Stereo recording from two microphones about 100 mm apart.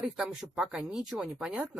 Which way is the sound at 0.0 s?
5° right (ahead or behind).